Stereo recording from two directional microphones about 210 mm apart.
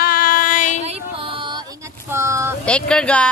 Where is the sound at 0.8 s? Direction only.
25° right (ahead or behind).